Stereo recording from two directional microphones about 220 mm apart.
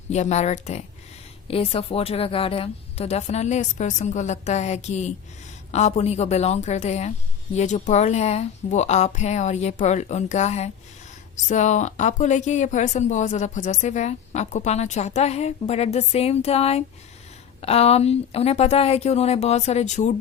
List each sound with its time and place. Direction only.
0.1 s a woman's voice: 30° left (ahead or behind)